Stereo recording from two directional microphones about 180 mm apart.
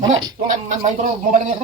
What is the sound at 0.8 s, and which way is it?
Speech, 45° right (ahead or behind).